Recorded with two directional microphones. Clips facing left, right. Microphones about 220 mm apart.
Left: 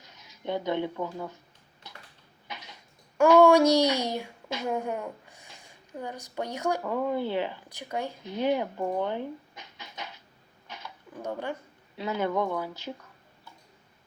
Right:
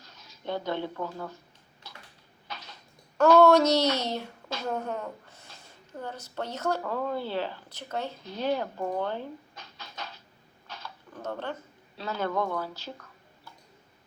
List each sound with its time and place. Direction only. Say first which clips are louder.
0.0 s speech: left 2 dB; 20° left (ahead or behind)
2.5 s speech: even; 15° left (ahead or behind)
10.7 s a sound: even; 15° left (ahead or behind)
11.9 s speech: left 2 dB; 15° left (ahead or behind)